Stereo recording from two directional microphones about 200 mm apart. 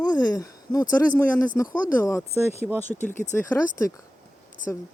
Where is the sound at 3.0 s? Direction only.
35° left (ahead or behind).